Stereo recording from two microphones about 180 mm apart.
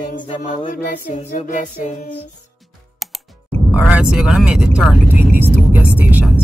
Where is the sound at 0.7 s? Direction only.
40° left (ahead or behind).